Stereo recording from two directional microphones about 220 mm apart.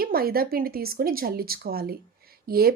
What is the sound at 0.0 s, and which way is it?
Speech, 45° right (ahead or behind).